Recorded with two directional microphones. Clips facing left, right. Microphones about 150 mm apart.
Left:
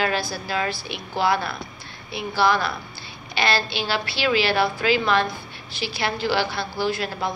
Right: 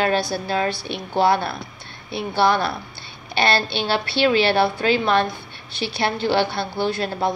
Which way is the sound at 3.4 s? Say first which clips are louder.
Right 3 dB; 30° right (ahead or behind).